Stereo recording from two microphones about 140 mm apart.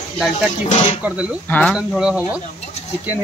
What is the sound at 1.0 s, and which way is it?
Speech, 10° right (ahead or behind).